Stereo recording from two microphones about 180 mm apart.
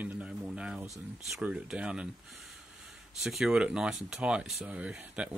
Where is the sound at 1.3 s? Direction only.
5° right (ahead or behind).